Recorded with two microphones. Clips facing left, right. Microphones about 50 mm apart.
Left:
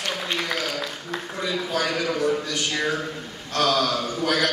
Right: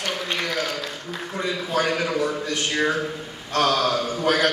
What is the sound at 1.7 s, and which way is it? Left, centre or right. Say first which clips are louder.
A man's voice: right 4 dB; right.